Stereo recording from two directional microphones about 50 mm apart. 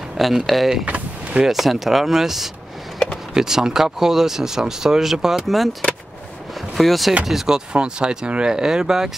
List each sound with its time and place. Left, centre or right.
0.2 s speech: centre
0.8 s vehicle: right
1.4 s speech: centre